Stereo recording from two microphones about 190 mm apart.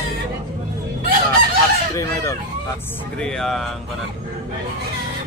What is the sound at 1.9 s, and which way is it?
Chicken, 15° left (ahead or behind).